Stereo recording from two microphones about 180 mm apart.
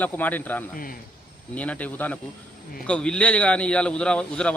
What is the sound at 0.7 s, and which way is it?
Speech, 50° left (ahead or behind).